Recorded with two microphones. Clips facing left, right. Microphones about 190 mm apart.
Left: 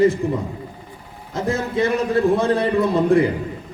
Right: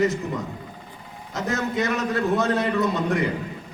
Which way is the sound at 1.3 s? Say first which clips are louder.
Left 4 dB; 30° left (ahead or behind).